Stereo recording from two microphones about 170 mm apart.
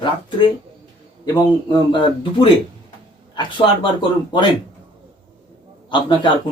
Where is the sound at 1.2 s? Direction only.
25° left (ahead or behind).